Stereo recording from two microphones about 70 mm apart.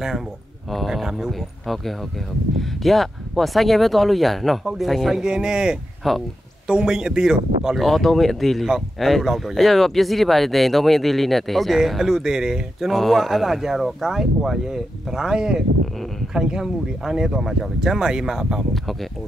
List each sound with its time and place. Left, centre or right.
0.7 s speech: centre
6.0 s speech: centre
6.7 s speech: centre
18.7 s speech: centre